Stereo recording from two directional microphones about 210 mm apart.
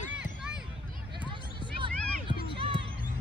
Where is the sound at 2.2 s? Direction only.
25° right (ahead or behind).